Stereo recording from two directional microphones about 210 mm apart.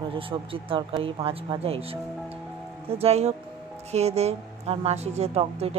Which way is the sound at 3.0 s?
30° right (ahead or behind).